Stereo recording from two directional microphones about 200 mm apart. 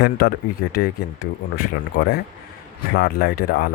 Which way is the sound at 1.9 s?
55° left (ahead or behind).